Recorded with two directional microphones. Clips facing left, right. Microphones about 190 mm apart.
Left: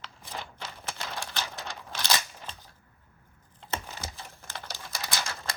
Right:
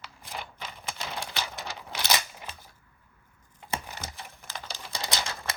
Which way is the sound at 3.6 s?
10° right (ahead or behind).